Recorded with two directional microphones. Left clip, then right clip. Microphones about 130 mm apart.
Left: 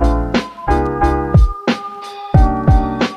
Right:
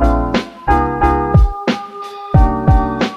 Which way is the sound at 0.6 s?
15° right (ahead or behind).